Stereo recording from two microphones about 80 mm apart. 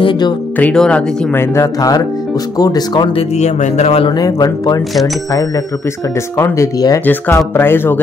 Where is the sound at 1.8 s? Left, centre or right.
Left.